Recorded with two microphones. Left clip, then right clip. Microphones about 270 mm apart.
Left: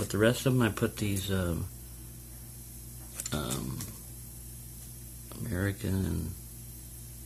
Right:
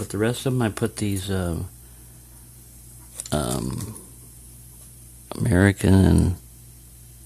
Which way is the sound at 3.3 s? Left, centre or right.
Right.